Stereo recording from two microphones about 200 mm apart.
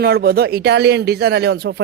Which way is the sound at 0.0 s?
50° right (ahead or behind).